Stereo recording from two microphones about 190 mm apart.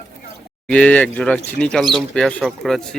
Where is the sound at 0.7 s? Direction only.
5° left (ahead or behind).